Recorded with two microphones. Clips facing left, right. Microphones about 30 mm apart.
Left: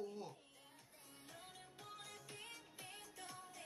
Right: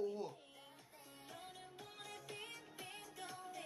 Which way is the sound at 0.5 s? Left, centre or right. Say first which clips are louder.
Right 4 dB; right.